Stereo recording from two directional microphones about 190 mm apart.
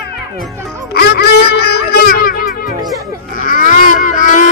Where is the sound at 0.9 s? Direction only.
55° left (ahead or behind).